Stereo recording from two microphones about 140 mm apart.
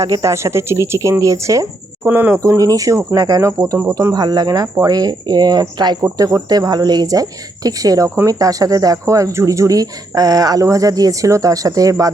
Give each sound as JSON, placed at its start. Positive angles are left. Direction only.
{"t": 0.0, "sound": "speech", "side_deg": -25}